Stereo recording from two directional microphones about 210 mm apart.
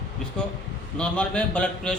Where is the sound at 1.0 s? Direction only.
5° left (ahead or behind).